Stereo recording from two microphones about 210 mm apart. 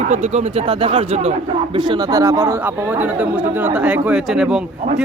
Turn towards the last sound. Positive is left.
turn(degrees=-5)  # may be behind; listen again after turning